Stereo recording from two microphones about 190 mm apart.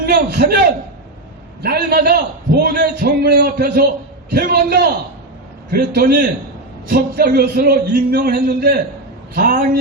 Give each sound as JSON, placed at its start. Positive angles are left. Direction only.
{"t": 0.0, "sound": "a man's voice", "side_deg": -55}